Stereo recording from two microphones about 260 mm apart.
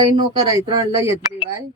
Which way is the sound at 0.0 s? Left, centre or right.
Centre.